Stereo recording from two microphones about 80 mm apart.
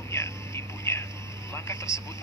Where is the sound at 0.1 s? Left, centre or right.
Left.